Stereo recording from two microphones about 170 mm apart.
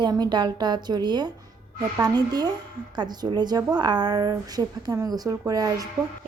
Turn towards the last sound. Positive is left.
turn(degrees=-20)  # may be behind; listen again after turning